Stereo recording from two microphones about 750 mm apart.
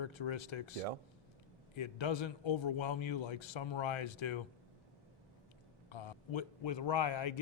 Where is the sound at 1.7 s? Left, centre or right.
Left.